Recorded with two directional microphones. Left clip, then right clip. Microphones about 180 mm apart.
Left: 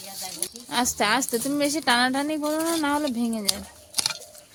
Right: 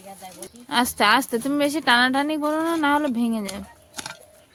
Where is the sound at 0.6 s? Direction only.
20° right (ahead or behind).